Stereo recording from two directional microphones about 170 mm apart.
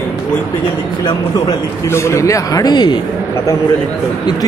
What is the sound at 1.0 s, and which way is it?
Speech, 20° left (ahead or behind).